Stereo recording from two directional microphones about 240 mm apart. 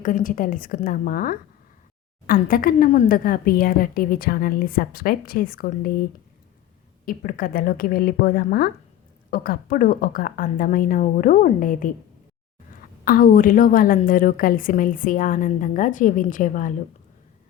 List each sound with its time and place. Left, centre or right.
0.0 s a woman's voice: left
13.1 s a woman's voice: left